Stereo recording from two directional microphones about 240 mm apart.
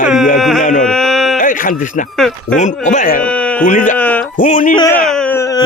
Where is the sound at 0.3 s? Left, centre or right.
Centre.